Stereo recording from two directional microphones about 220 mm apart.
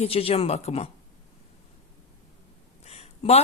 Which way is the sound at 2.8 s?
30° left (ahead or behind).